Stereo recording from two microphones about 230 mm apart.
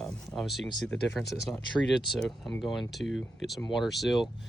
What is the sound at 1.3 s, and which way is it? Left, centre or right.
Speech, centre.